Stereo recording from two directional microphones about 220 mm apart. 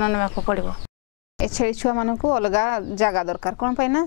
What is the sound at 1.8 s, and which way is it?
Speech, 20° left (ahead or behind).